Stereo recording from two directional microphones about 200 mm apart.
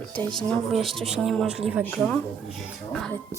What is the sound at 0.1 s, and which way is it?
Speech, 5° left (ahead or behind).